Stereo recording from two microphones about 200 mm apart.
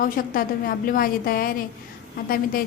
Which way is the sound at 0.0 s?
45° left (ahead or behind).